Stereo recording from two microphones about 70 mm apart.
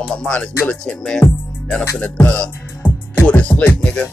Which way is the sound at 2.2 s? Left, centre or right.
Left.